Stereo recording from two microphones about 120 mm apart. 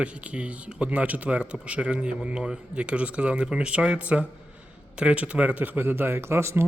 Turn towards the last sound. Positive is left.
turn(degrees=-20)  # may be behind; listen again after turning